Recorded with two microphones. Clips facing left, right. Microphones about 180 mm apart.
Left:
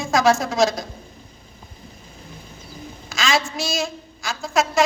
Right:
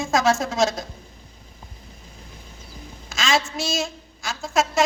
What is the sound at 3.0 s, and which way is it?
A woman's voice, 25° right (ahead or behind).